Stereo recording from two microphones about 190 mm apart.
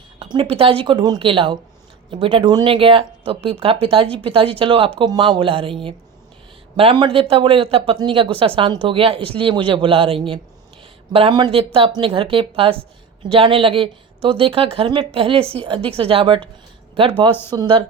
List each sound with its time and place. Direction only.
0.3 s speech: 30° right (ahead or behind)
17.5 s speech: 25° right (ahead or behind)